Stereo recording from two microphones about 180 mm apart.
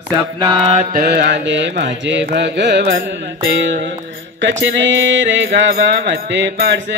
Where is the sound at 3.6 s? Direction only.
90° right.